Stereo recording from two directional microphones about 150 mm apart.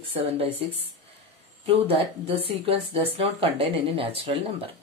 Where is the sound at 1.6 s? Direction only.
40° right (ahead or behind).